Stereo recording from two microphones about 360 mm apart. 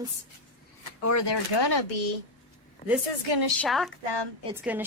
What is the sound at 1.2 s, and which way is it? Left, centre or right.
Speech, left.